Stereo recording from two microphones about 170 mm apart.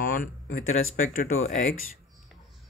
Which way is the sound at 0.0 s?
55° left (ahead or behind).